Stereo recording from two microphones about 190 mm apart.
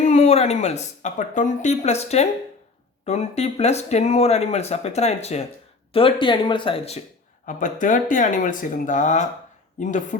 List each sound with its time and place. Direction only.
0.0 s speech: 35° left (ahead or behind)
7.4 s speech: 45° left (ahead or behind)